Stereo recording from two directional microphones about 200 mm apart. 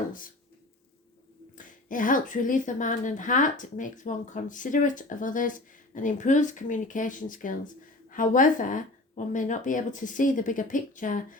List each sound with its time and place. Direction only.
1.5 s a woman's voice: 40° left (ahead or behind)